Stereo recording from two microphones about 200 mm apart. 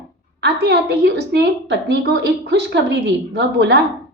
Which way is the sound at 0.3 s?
55° right (ahead or behind).